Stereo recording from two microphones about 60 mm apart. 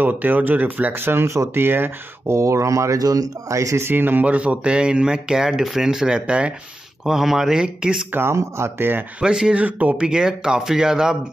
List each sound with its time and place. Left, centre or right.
0.0 s speech: right
2.3 s speech: right
3.8 s speech: right; by 6.5 s centre
7.1 s speech: centre
8.1 s speech: right
8.7 s speech: right
9.2 s speech: centre
9.6 s speech: right
10.0 s speech: centre